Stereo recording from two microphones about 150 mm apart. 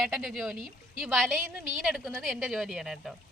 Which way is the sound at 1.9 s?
Centre (ahead or behind).